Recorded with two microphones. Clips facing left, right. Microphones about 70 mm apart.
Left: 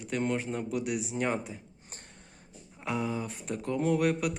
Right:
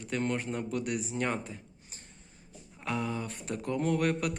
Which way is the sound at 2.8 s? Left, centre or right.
Centre.